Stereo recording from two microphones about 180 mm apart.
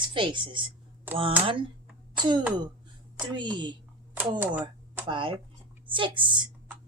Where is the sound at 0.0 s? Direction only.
25° right (ahead or behind).